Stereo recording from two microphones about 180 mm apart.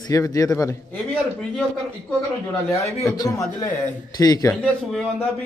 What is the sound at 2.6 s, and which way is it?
A man's voice, 15° left (ahead or behind).